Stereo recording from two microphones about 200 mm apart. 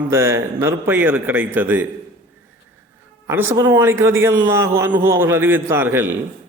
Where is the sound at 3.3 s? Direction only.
10° right (ahead or behind).